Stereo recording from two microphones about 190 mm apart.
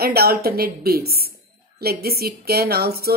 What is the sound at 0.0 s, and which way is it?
A woman's voice, 55° right (ahead or behind).